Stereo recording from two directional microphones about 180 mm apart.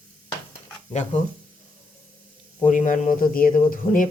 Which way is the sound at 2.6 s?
45° left (ahead or behind).